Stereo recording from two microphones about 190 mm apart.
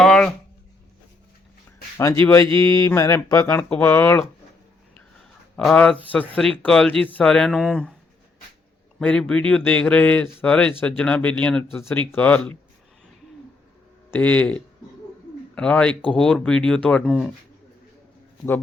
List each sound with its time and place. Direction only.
0.0 s a sound: centre (ahead or behind)
2.0 s speech: 15° left (ahead or behind)
5.5 s speech: 5° left (ahead or behind)
9.0 s speech: 5° left (ahead or behind)
14.1 s speech: 10° left (ahead or behind)